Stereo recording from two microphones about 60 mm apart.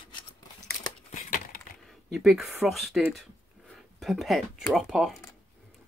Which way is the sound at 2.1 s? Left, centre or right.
Centre.